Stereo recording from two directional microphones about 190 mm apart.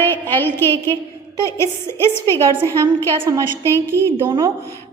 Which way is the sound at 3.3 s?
20° right (ahead or behind).